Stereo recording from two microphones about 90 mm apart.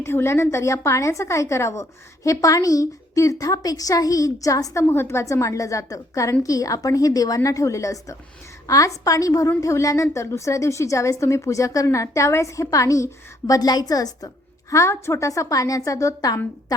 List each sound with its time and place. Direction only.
0.0 s a woman's voice: 30° left (ahead or behind)
13.5 s a woman's voice: 45° left (ahead or behind)
14.7 s a woman's voice: 35° left (ahead or behind)